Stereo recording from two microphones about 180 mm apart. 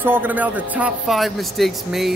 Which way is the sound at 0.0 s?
10° right (ahead or behind).